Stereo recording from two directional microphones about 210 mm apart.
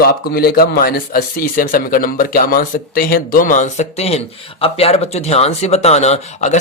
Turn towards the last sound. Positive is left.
turn(degrees=30)  # may be behind; listen again after turning